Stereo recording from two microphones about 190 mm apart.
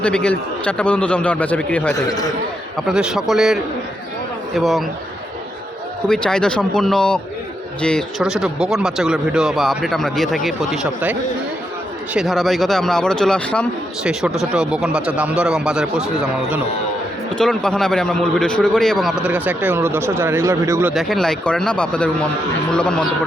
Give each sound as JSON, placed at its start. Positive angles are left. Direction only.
{"t": 0.0, "sound": "speech", "side_deg": 5}
{"t": 2.0, "sound": "a man's voice", "side_deg": 20}
{"t": 2.7, "sound": "speech", "side_deg": -5}
{"t": 6.1, "sound": "speech", "side_deg": 5}
{"t": 20.9, "sound": "speech", "side_deg": 0}